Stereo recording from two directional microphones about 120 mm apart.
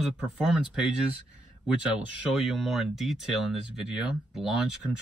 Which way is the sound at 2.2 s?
Centre (ahead or behind).